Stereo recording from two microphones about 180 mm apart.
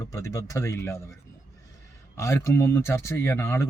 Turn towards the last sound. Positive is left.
turn(degrees=15)  # may be behind; listen again after turning